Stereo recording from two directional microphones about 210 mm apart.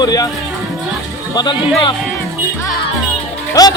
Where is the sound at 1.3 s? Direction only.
20° left (ahead or behind).